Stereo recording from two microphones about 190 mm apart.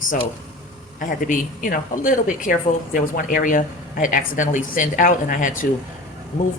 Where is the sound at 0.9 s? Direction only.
45° left (ahead or behind).